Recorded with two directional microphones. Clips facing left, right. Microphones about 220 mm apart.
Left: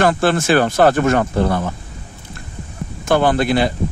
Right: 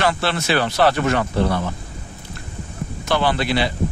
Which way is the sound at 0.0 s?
50° left (ahead or behind).